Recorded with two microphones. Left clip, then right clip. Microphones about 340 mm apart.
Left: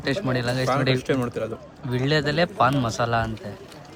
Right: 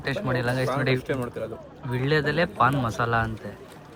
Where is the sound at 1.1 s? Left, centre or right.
Left.